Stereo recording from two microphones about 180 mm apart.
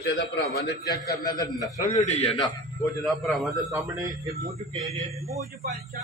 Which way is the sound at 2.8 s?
Centre (ahead or behind).